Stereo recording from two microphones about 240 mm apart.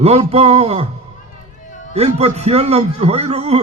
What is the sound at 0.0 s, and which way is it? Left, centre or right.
Speech, right.